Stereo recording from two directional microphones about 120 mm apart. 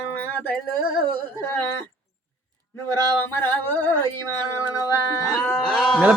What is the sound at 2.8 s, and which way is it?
Speech, 20° left (ahead or behind).